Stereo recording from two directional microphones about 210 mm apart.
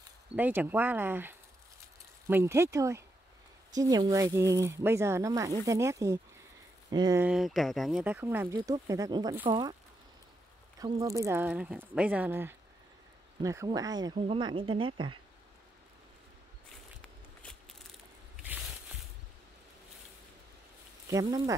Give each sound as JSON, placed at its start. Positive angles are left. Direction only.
{"t": 0.4, "sound": "speech", "side_deg": -10}
{"t": 7.2, "sound": "speech", "side_deg": 0}
{"t": 10.8, "sound": "speech", "side_deg": -15}
{"t": 17.0, "sound": "a sound", "side_deg": 5}
{"t": 18.3, "sound": "a sound", "side_deg": -5}
{"t": 21.1, "sound": "speech", "side_deg": -15}